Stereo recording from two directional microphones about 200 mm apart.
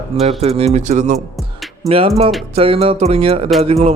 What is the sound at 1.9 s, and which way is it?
Speech, 30° right (ahead or behind).